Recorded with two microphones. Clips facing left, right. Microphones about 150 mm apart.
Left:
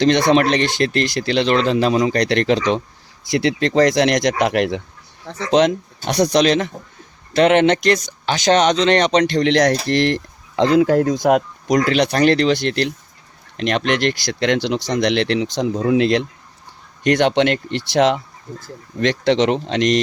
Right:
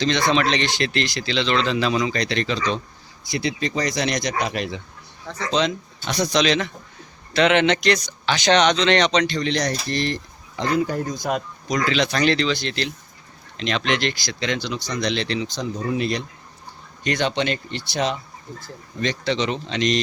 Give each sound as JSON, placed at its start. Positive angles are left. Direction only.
{"t": 0.0, "sound": "speech", "side_deg": 60}
{"t": 2.1, "sound": "speech", "side_deg": 70}
{"t": 3.2, "sound": "speech", "side_deg": 80}
{"t": 5.5, "sound": "speech", "side_deg": 60}
{"t": 17.0, "sound": "speech", "side_deg": 70}